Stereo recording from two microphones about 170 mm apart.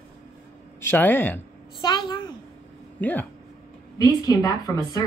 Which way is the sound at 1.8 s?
25° left (ahead or behind).